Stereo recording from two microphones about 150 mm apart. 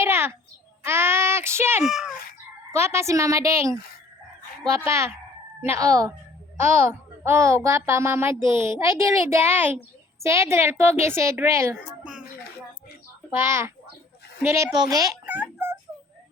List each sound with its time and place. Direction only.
0.0 s babbling: 15° right (ahead or behind)
0.9 s speech: 15° right (ahead or behind)
1.8 s a child's voice: 5° right (ahead or behind)
2.7 s a child's voice: 20° right (ahead or behind)
7.3 s a child's voice: 20° right (ahead or behind)
13.3 s a child's voice: 15° right (ahead or behind)
15.3 s a sound: 10° right (ahead or behind)